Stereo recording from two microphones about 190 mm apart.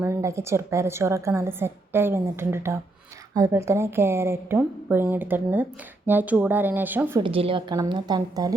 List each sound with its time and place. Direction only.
0.0 s a woman's voice: 15° right (ahead or behind)
7.2 s a woman's voice: 30° right (ahead or behind)